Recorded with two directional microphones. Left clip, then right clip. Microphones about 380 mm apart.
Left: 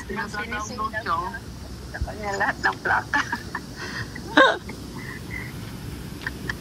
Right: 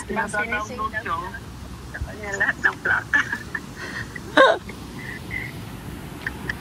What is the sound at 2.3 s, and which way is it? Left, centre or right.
Speech, centre.